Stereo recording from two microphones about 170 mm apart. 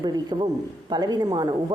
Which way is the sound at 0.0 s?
25° right (ahead or behind).